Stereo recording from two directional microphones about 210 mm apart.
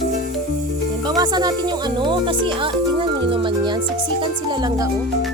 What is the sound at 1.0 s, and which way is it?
Speech, 20° right (ahead or behind).